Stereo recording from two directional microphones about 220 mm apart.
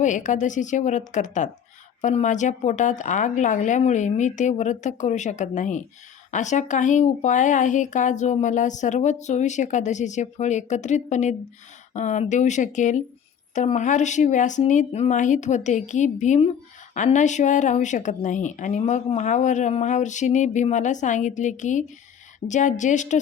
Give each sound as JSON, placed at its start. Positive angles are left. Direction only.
{"t": 0.0, "sound": "speech", "side_deg": 35}